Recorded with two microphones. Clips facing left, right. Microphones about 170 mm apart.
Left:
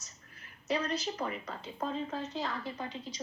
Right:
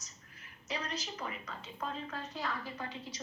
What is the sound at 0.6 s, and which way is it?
A woman's voice, 30° left (ahead or behind).